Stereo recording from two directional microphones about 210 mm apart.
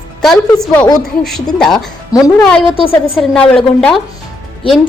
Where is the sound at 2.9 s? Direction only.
5° left (ahead or behind).